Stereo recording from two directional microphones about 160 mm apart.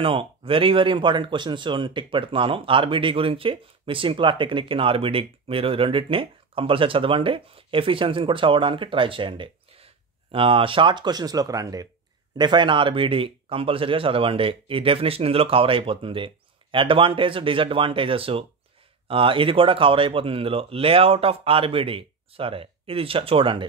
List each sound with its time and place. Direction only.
0.0 s speech: 35° right (ahead or behind)